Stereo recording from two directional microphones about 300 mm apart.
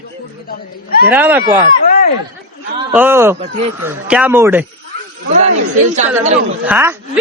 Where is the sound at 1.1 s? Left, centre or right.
Centre.